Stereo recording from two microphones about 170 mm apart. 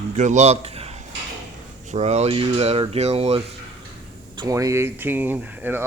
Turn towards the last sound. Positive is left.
turn(degrees=-10)  # may be behind; listen again after turning